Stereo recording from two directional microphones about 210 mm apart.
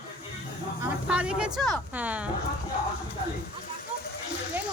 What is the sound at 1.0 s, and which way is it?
A woman's voice, 5° right (ahead or behind).